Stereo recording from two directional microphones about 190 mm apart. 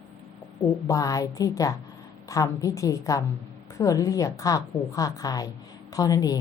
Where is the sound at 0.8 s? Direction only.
15° left (ahead or behind).